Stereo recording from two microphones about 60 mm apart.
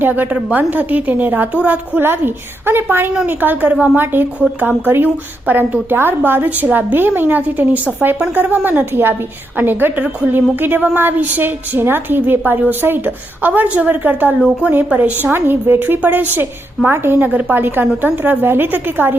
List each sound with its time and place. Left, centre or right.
0.0 s a woman's voice: right
2.0 s a woman's voice: right
4.0 s a woman's voice: right
13.5 s a woman's voice: right